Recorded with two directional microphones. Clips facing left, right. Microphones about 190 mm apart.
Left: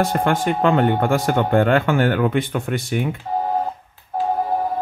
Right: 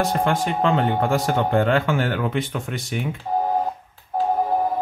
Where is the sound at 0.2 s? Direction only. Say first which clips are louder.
Left 2 dB; 55° left (ahead or behind).